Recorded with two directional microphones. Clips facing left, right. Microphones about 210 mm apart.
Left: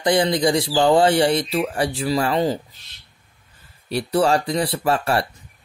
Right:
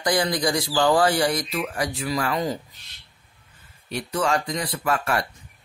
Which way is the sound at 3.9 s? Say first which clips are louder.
Left 6 dB; 35° left (ahead or behind).